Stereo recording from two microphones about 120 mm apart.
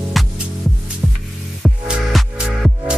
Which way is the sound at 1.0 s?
5° left (ahead or behind).